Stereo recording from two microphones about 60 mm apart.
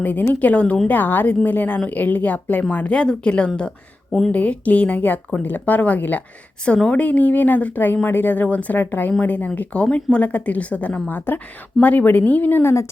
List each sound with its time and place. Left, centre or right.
0.0 s speech: left
0.9 s speech: left
11.3 s speech: left